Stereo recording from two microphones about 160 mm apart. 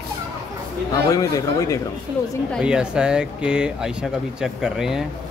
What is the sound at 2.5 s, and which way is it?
Speech, 5° right (ahead or behind).